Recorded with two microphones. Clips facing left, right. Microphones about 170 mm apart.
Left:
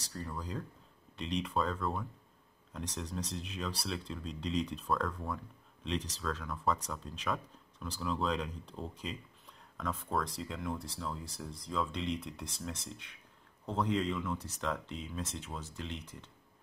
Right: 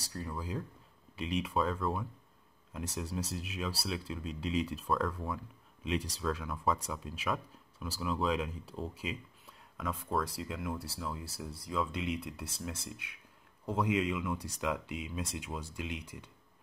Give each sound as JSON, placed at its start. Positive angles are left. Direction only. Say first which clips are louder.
{"t": 0.1, "sound": "speech", "louder": "right 2 dB", "side_deg": -5}